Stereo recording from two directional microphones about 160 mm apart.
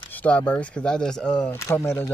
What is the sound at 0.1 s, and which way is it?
Speech, 10° left (ahead or behind).